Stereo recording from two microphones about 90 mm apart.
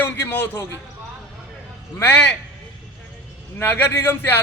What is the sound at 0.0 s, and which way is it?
Speech, 20° left (ahead or behind).